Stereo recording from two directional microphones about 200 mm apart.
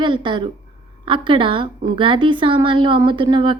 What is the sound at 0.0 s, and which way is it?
A woman's voice, 25° right (ahead or behind).